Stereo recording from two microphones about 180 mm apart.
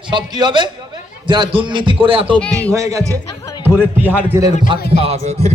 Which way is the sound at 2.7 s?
15° right (ahead or behind).